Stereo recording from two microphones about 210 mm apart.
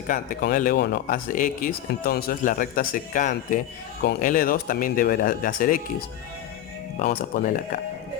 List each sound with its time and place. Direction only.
0.1 s speech: 40° left (ahead or behind)
7.0 s speech: 40° left (ahead or behind)